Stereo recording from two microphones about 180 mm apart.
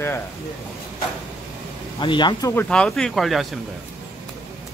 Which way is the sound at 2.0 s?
25° left (ahead or behind).